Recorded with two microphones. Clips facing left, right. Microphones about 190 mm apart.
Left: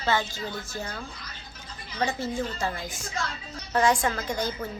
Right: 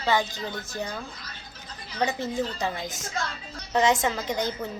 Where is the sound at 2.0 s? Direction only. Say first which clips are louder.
Right 1 dB; 20° right (ahead or behind).